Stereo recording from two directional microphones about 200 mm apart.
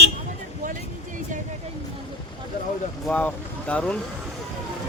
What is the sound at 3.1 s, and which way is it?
Speech, 5° left (ahead or behind).